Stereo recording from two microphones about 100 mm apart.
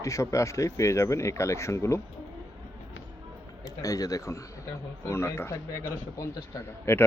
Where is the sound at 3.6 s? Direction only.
35° left (ahead or behind).